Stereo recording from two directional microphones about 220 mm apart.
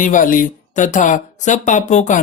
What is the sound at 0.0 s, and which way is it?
Speech, 35° left (ahead or behind).